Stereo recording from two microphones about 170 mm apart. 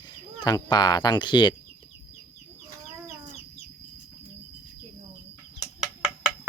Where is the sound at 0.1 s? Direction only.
25° left (ahead or behind).